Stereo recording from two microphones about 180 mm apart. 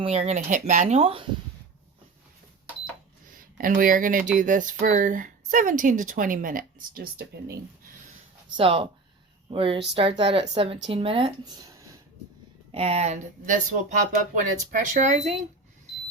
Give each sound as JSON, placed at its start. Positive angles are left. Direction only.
{"t": 0.0, "sound": "speech", "side_deg": -35}
{"t": 3.3, "sound": "speech", "side_deg": -50}
{"t": 8.5, "sound": "speech", "side_deg": -30}
{"t": 12.7, "sound": "speech", "side_deg": -35}